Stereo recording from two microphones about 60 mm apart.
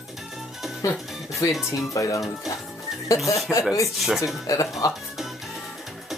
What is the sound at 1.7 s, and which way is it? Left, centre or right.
Speech, left.